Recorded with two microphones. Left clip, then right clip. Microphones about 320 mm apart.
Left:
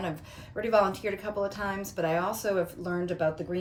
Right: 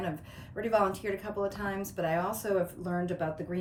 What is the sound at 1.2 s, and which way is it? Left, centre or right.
Speech, centre.